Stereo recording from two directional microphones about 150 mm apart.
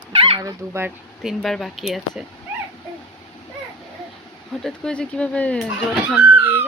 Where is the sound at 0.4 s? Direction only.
15° right (ahead or behind).